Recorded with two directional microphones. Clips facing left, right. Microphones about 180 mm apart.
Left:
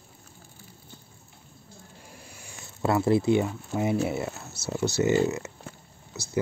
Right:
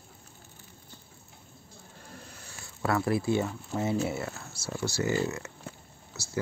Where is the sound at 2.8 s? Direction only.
25° left (ahead or behind).